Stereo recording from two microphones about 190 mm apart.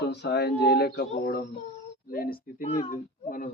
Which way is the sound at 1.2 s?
55° left (ahead or behind).